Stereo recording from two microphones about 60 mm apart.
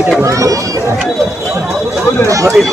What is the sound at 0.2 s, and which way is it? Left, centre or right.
Speech, right.